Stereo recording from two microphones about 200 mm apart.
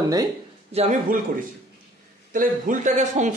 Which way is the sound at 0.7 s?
35° right (ahead or behind).